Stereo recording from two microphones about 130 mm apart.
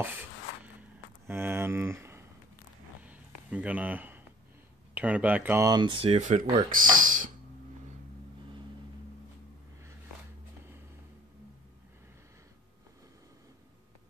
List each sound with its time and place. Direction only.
1.2 s speech: 15° right (ahead or behind)
3.0 s a sound: 10° right (ahead or behind)
4.9 s speech: 10° right (ahead or behind)
5.6 s speech: 35° right (ahead or behind)
6.1 s speech: 70° right (ahead or behind)
6.7 s a sound: 90° right